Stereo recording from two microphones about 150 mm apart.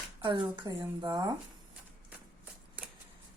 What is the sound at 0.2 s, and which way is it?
Speech, 35° right (ahead or behind).